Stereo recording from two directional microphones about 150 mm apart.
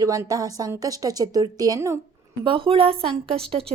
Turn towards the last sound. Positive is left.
turn(degrees=-40)  # may be behind; listen again after turning